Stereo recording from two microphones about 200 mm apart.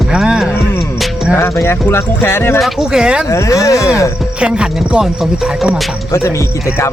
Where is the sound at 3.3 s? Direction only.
15° left (ahead or behind).